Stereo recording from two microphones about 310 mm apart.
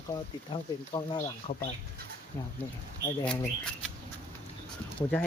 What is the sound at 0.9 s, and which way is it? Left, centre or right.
Speech, centre.